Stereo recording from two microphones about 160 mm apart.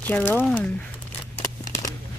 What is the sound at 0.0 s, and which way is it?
Speech, 10° left (ahead or behind).